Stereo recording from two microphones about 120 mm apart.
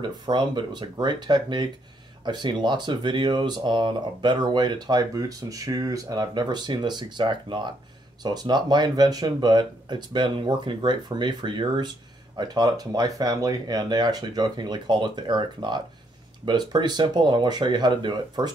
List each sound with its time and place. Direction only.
0.0 s speech: 40° right (ahead or behind)